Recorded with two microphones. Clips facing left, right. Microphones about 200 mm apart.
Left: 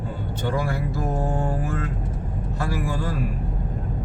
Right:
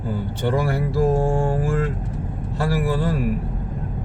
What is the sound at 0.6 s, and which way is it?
Mantra, 30° right (ahead or behind).